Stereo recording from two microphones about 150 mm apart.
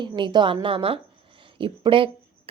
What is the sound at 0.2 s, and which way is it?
A woman's voice, 30° right (ahead or behind).